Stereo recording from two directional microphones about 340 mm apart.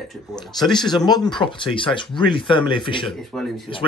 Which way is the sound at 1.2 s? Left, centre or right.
Centre.